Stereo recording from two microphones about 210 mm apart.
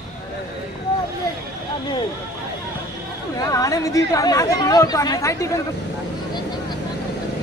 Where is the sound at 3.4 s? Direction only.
15° left (ahead or behind).